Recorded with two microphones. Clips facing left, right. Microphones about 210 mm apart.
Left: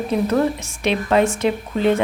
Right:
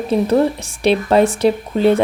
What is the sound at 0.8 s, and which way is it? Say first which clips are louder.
A woman's voice: right 4 dB; 35° right (ahead or behind).